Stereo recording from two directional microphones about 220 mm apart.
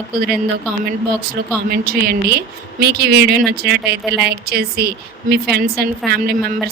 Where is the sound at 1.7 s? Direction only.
45° right (ahead or behind).